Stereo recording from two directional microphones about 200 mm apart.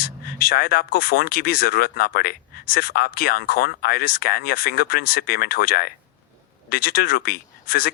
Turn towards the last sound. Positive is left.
turn(degrees=50)  # may be behind; listen again after turning